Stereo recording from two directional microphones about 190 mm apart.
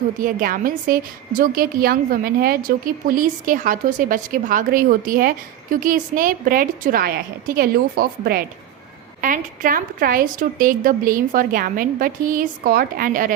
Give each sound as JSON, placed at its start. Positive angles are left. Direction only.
{"t": 0.2, "sound": "a woman's voice", "side_deg": -45}